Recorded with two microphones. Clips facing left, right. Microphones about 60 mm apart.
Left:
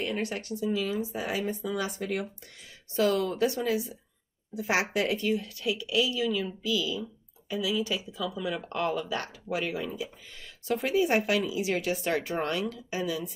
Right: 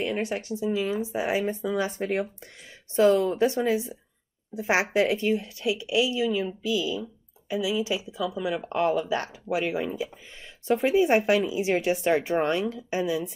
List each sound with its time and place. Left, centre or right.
0.0 s speech: right